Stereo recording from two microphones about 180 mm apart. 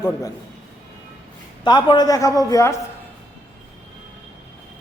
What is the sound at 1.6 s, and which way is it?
A man's voice, 25° left (ahead or behind).